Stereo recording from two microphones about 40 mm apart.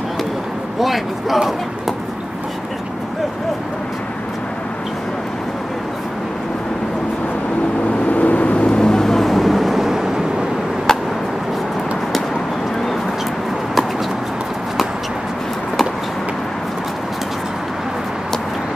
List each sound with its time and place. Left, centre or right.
0.7 s speech: centre
8.1 s vehicle: left
8.6 s vehicle: centre
10.9 s a sound: centre